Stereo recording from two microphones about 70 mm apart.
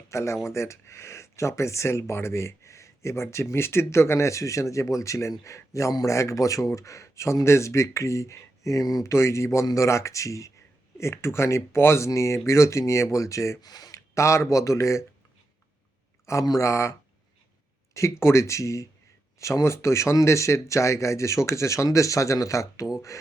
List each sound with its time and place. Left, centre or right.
0.1 s speech: left
9.1 s speech: left
13.6 s speech: left
13.9 s speech: left
16.2 s speech: left
17.9 s speech: left